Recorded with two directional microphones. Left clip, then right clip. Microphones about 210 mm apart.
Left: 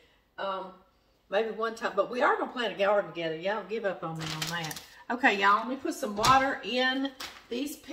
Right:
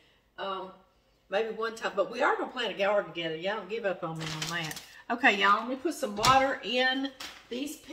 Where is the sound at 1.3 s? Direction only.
10° right (ahead or behind).